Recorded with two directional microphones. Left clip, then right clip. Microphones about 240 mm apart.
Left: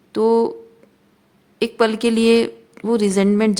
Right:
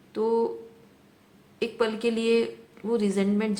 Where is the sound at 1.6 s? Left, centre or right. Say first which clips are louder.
Left 8 dB; left.